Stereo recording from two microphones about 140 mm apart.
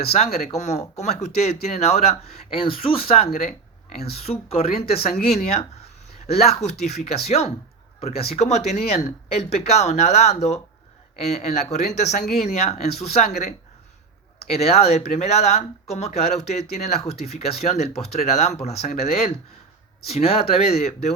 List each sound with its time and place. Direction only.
0.0 s speech: 45° left (ahead or behind)
14.5 s speech: 50° left (ahead or behind)